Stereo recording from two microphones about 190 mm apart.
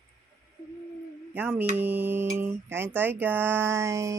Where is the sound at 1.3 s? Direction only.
10° right (ahead or behind).